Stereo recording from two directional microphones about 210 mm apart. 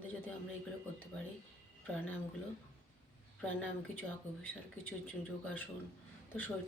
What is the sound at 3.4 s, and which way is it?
A woman's voice, 10° left (ahead or behind).